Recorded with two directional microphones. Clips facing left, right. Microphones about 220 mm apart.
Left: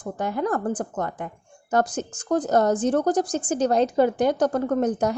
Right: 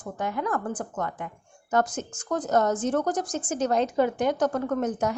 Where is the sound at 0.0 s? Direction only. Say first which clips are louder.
Left 4 dB; 35° left (ahead or behind).